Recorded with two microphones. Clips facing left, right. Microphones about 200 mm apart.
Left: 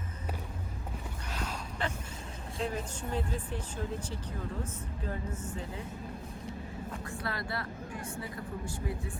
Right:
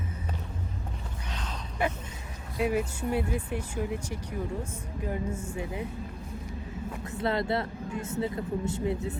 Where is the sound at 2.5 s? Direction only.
10° right (ahead or behind).